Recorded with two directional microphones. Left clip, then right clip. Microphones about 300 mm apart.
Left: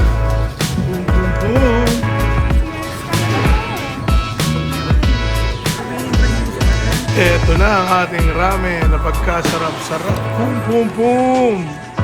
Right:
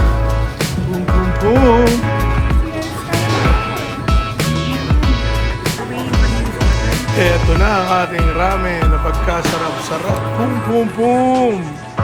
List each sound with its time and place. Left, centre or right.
0.6 s music: centre
6.6 s music: centre
10.8 s speech: centre